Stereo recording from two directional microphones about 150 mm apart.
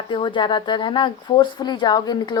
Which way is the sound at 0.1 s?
35° left (ahead or behind).